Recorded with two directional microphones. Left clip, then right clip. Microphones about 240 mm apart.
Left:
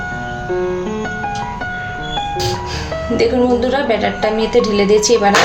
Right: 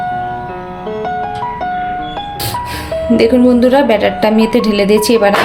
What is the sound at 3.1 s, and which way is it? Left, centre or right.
A woman's voice, right.